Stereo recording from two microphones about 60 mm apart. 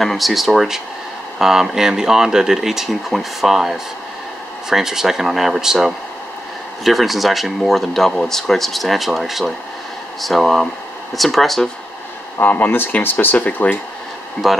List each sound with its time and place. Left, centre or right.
0.0 s speech: centre
12.4 s speech: left
14.4 s speech: centre